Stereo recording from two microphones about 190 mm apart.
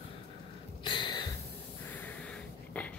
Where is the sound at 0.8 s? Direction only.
20° left (ahead or behind).